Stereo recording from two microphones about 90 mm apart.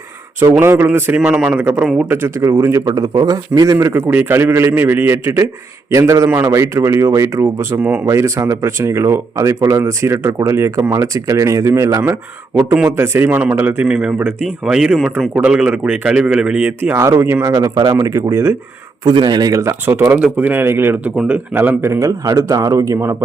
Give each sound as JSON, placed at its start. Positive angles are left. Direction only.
{"t": 0.6, "sound": "a man's voice", "side_deg": -25}
{"t": 2.0, "sound": "a man's voice", "side_deg": -25}
{"t": 2.8, "sound": "speech", "side_deg": -40}
{"t": 7.8, "sound": "a man's voice", "side_deg": -15}
{"t": 8.0, "sound": "speech", "side_deg": -35}
{"t": 12.8, "sound": "a man's voice", "side_deg": -25}
{"t": 13.8, "sound": "a man's voice", "side_deg": -10}
{"t": 16.9, "sound": "speech", "side_deg": -30}
{"t": 17.9, "sound": "speech", "side_deg": -35}
{"t": 19.0, "sound": "a man's voice", "side_deg": -55}
{"t": 19.8, "sound": "a man's voice", "side_deg": -25}